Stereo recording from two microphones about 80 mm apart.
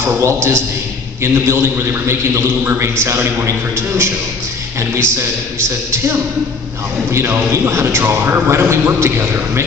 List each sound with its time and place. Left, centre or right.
0.2 s a man's voice: right
5.6 s a man's voice: right